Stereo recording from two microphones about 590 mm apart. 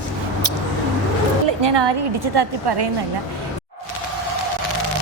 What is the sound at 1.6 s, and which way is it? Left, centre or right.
A woman's voice, right.